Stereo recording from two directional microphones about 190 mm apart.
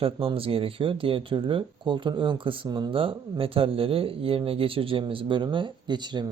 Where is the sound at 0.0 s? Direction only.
30° right (ahead or behind).